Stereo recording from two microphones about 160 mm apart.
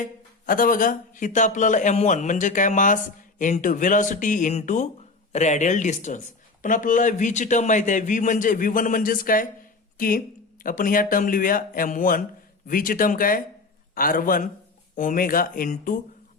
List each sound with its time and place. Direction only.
0.0 s speech: 60° left (ahead or behind)